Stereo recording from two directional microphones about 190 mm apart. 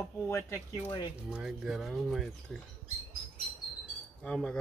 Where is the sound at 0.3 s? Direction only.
15° left (ahead or behind).